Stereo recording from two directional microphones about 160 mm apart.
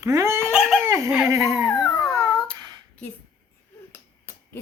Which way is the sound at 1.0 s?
Centre (ahead or behind).